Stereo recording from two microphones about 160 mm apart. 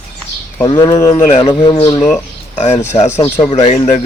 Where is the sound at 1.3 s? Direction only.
40° left (ahead or behind).